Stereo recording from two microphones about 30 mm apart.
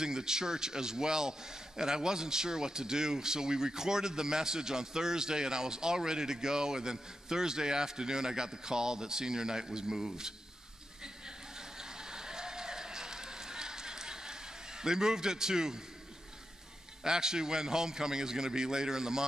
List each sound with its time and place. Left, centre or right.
0.0 s a man's voice: right
11.2 s a sound: right
17.0 s a man's voice: right